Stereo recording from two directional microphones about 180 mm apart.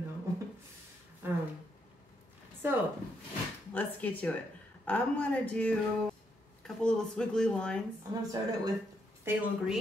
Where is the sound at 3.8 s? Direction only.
10° left (ahead or behind).